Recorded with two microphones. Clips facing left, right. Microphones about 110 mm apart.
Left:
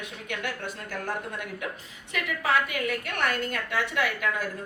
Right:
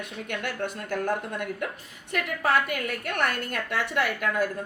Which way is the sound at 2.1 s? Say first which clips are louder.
Right 2 dB; 50° right (ahead or behind).